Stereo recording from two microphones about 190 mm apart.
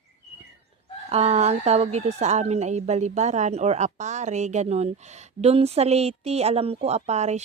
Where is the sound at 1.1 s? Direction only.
35° right (ahead or behind).